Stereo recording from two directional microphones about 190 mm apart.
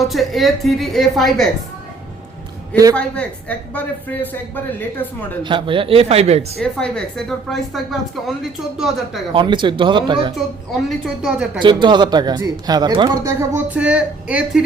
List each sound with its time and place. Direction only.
0.1 s a woman's voice: centre (ahead or behind)
2.9 s speech: 5° left (ahead or behind)
5.4 s speech: 25° right (ahead or behind)
6.6 s a woman's voice: 5° left (ahead or behind)
9.3 s speech: 25° right (ahead or behind)
10.3 s a woman's voice: centre (ahead or behind)
11.6 s speech: 25° right (ahead or behind); by 14.6 s 5° right (ahead or behind)